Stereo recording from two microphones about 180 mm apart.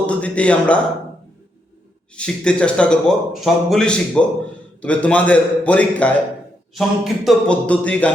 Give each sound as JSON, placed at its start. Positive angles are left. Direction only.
{"t": 0.1, "sound": "a man's voice", "side_deg": 5}
{"t": 2.1, "sound": "a man's voice", "side_deg": 5}